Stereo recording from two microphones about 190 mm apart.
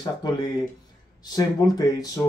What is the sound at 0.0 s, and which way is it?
Speech, 20° left (ahead or behind).